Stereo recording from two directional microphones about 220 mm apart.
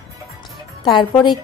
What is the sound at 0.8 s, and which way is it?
Speech, 20° left (ahead or behind).